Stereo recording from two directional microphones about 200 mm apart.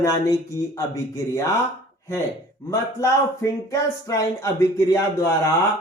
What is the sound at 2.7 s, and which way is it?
Speech, 15° left (ahead or behind).